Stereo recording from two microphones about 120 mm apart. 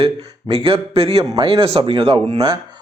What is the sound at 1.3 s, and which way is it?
Speech, 45° right (ahead or behind).